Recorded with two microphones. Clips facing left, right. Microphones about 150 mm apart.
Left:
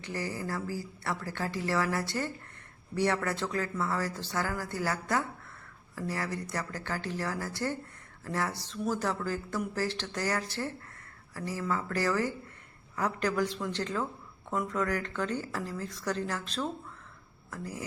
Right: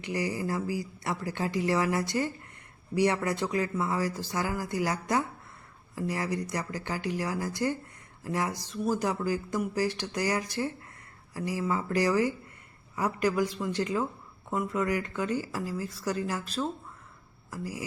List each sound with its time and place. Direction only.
0.0 s speech: 15° right (ahead or behind)